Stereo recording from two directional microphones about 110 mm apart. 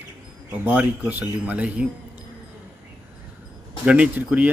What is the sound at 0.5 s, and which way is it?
Speech, 15° right (ahead or behind).